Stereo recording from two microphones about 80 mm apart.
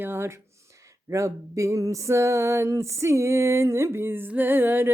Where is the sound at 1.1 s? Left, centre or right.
Right.